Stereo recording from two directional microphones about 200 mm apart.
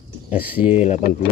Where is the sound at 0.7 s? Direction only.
35° left (ahead or behind).